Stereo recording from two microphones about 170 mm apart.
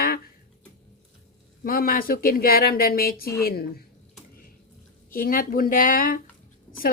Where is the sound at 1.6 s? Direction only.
55° left (ahead or behind).